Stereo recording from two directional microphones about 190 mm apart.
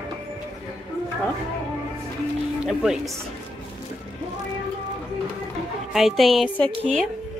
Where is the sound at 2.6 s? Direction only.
5° right (ahead or behind).